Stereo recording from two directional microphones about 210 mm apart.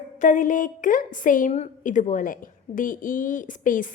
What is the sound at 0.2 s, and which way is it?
A woman's voice, 35° left (ahead or behind).